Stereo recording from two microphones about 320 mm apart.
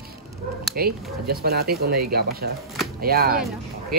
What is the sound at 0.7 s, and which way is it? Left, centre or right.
Speech, right.